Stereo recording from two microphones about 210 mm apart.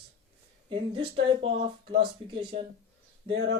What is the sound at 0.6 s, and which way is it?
Speech, 25° right (ahead or behind).